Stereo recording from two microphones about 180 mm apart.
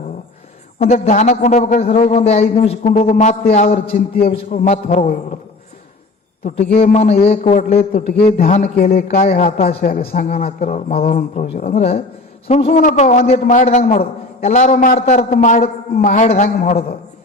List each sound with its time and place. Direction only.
0.8 s a man's voice: 35° left (ahead or behind); by 4.3 s 55° left (ahead or behind)
4.3 s a man's voice: 35° left (ahead or behind)
6.8 s a man's voice: 40° left (ahead or behind)
9.0 s a man's voice: 40° left (ahead or behind)